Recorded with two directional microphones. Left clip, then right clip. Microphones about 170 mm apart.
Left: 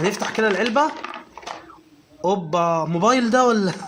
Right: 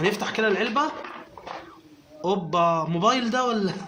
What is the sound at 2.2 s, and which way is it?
A man's voice, 30° left (ahead or behind).